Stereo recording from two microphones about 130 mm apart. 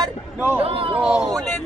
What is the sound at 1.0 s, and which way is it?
Speech, 5° right (ahead or behind).